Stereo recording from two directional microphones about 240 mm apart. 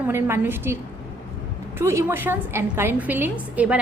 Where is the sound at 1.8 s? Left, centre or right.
Centre.